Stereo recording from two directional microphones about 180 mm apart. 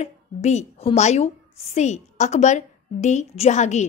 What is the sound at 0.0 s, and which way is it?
A woman's voice, 40° left (ahead or behind).